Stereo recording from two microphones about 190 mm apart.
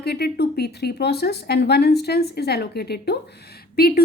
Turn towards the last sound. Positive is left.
turn(degrees=55)  # may be behind; listen again after turning